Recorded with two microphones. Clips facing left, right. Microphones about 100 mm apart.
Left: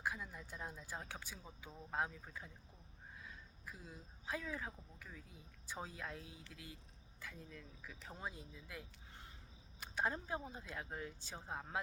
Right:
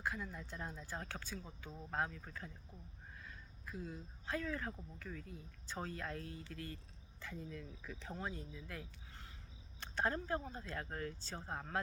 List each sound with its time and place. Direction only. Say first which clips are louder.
0.0 s speech: right 1 dB; 15° left (ahead or behind)